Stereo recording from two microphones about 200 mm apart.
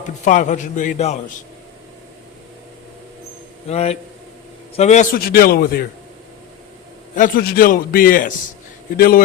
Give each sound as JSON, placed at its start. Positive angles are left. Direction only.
{"t": 0.0, "sound": "a man's voice", "side_deg": 40}
{"t": 3.7, "sound": "a man's voice", "side_deg": 30}
{"t": 7.2, "sound": "a man's voice", "side_deg": 45}